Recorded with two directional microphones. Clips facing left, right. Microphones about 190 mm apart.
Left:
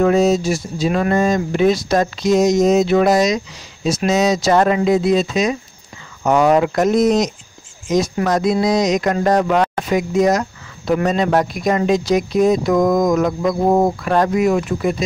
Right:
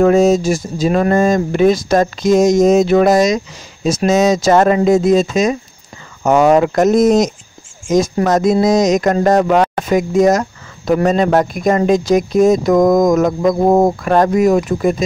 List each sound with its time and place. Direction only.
0.0 s speech: 45° right (ahead or behind)